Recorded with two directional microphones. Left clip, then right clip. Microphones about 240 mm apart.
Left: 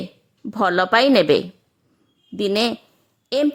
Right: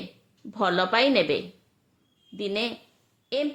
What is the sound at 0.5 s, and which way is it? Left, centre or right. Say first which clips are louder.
Speech: left 6 dB; left.